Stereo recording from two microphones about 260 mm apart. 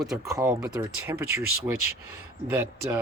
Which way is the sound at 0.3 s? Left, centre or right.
Centre.